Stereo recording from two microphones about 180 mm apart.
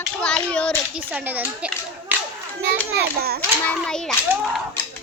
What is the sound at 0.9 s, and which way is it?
Speech, 10° right (ahead or behind).